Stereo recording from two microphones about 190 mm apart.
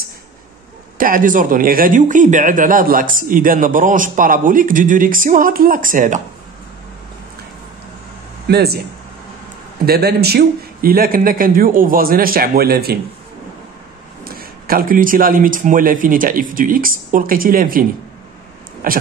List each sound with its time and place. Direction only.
0.9 s speech: 45° right (ahead or behind)
8.5 s speech: 55° right (ahead or behind)
9.8 s speech: 55° right (ahead or behind)
14.2 s speech: 50° right (ahead or behind)